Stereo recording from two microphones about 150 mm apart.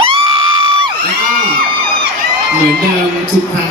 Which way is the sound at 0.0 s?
35° right (ahead or behind).